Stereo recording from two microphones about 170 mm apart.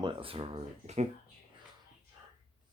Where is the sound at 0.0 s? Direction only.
30° right (ahead or behind).